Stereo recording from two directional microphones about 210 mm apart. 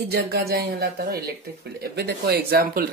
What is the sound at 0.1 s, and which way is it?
Speech, 50° right (ahead or behind).